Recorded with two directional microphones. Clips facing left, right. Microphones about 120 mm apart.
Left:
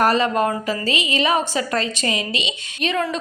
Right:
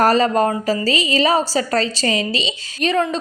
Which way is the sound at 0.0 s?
40° right (ahead or behind).